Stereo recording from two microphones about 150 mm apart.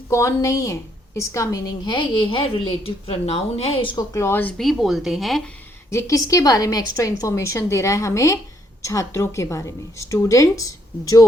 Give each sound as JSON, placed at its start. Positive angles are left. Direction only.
{"t": 0.1, "sound": "a woman's voice", "side_deg": 20}
{"t": 4.1, "sound": "speech", "side_deg": 15}
{"t": 4.5, "sound": "speech", "side_deg": 0}
{"t": 5.9, "sound": "a woman's voice", "side_deg": 20}